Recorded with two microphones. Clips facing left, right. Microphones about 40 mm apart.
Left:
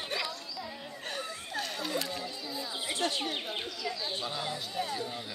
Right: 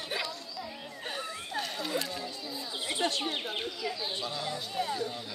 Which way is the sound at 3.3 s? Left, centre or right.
Centre.